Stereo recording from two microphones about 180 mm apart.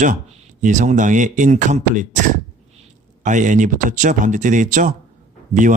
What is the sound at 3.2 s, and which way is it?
A man's voice, 45° right (ahead or behind).